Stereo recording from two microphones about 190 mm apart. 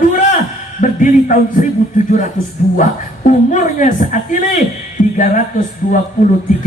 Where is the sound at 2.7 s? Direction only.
45° left (ahead or behind).